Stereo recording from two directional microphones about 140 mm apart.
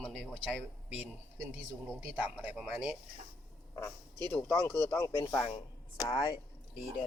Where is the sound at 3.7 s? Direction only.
15° left (ahead or behind).